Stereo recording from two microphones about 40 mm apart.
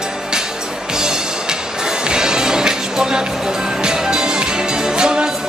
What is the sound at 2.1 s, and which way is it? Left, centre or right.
Music, centre.